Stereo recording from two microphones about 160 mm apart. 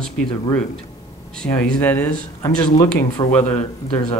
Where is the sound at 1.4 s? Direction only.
5° left (ahead or behind).